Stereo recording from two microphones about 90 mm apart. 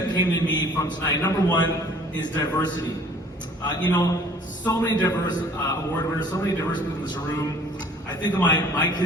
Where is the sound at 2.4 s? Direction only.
50° left (ahead or behind).